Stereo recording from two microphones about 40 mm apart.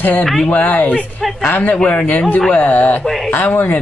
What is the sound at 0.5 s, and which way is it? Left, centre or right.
Speech, left.